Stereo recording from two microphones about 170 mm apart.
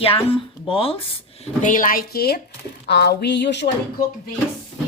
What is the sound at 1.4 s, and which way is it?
Speech, 50° left (ahead or behind).